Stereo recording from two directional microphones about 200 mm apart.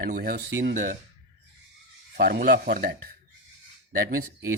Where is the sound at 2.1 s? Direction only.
45° right (ahead or behind).